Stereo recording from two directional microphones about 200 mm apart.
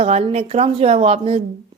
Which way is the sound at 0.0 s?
30° right (ahead or behind).